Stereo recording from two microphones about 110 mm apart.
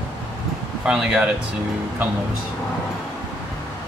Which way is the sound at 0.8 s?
5° right (ahead or behind).